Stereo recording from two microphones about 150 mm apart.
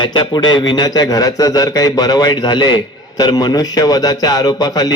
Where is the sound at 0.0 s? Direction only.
30° left (ahead or behind).